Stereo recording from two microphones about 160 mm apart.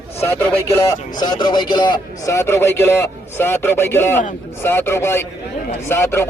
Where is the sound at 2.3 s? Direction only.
15° left (ahead or behind).